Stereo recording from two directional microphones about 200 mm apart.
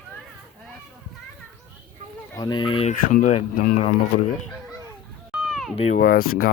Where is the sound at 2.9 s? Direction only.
40° left (ahead or behind).